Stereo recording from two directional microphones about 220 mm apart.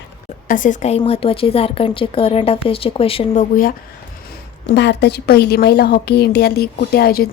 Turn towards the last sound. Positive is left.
turn(degrees=45)  # may be behind; listen again after turning